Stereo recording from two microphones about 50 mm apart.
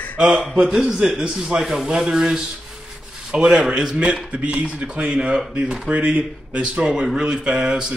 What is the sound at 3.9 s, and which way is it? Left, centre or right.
Speech, right.